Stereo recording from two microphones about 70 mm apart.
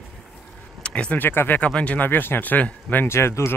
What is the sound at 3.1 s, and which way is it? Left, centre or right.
Speech, left.